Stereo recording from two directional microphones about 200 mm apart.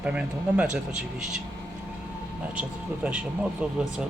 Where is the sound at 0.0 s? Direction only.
5° right (ahead or behind).